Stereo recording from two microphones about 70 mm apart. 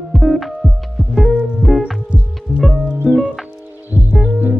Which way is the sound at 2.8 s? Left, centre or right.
Centre.